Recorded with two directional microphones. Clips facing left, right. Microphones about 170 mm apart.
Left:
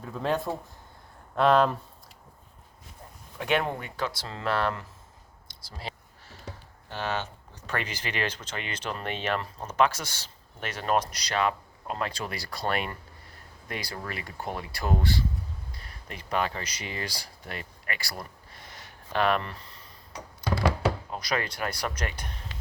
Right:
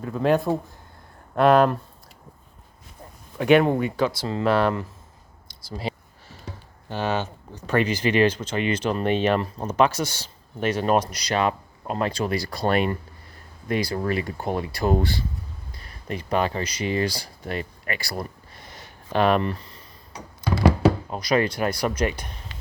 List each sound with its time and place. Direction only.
0.0 s speech: 5° right (ahead or behind)
3.3 s speech: 5° right (ahead or behind)
5.9 s a sound: 10° right (ahead or behind)
6.9 s speech: 10° right (ahead or behind); by 14.9 s 25° right (ahead or behind)
16.0 s speech: 25° right (ahead or behind)
19.1 s speech: 20° right (ahead or behind)
20.8 s speech: 20° right (ahead or behind)